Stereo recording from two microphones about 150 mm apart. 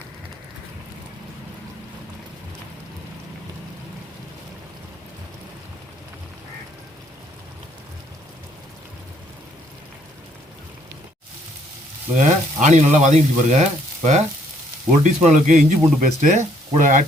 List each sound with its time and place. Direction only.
12.1 s speech: 55° right (ahead or behind)